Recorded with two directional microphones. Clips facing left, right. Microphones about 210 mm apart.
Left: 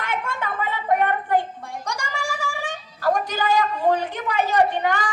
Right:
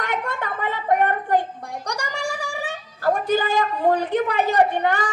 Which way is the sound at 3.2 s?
55° right (ahead or behind).